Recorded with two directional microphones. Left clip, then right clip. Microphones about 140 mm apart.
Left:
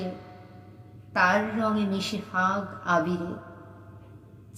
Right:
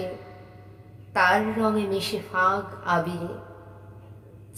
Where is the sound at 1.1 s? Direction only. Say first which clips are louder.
Right 2 dB; 20° right (ahead or behind).